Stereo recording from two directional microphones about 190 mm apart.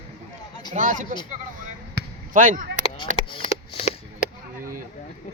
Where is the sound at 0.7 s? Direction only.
45° right (ahead or behind).